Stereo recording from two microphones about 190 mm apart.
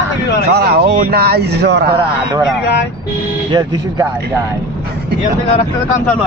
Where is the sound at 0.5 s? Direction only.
60° right (ahead or behind).